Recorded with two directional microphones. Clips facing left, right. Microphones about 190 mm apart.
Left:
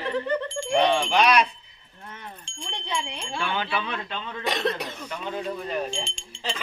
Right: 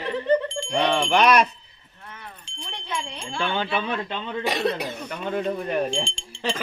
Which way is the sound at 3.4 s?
30° right (ahead or behind).